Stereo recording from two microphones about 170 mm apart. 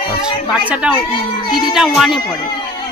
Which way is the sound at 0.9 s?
30° left (ahead or behind).